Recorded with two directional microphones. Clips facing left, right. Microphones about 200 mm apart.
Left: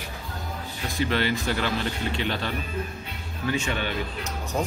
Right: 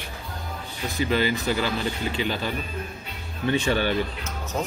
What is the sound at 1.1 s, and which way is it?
Speech, 5° right (ahead or behind).